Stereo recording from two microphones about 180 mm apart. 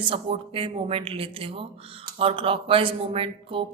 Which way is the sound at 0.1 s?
30° right (ahead or behind).